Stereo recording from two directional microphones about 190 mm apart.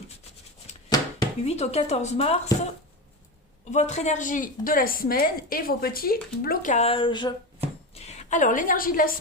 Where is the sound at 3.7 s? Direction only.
35° left (ahead or behind).